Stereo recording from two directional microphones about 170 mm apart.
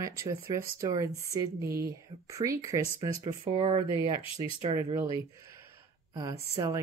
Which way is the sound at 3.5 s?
35° right (ahead or behind).